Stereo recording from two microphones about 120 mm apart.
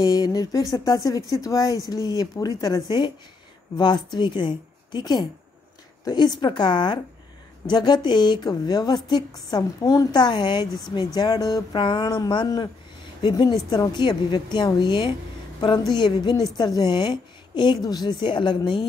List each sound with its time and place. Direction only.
0.0 s a woman's voice: 30° left (ahead or behind)